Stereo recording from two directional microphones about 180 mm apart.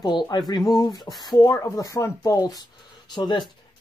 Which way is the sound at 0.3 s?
20° left (ahead or behind).